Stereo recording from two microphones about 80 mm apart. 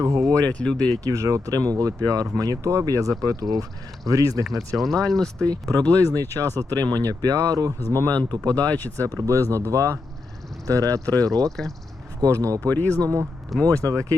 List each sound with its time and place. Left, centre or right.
0.0 s speech: right
0.3 s speech: centre
1.0 s speech: right
4.8 s speech: centre
5.5 s speech: right
8.6 s speech: left
9.0 s speech: right
11.0 s speech: left
11.4 s speech: centre
12.2 s speech: right
12.6 s speech: left
13.0 s speech: right